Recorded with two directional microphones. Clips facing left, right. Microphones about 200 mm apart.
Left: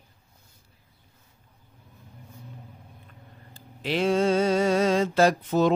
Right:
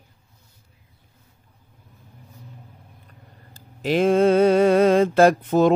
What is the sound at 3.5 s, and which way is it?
Mantra, 45° right (ahead or behind).